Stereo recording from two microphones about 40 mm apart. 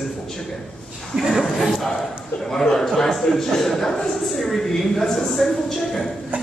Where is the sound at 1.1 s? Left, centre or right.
Centre.